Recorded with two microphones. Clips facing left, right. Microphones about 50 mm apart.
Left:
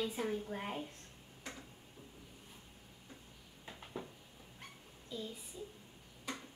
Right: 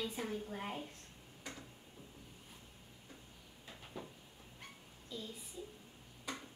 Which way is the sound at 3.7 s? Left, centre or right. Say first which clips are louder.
Left 3 dB; centre.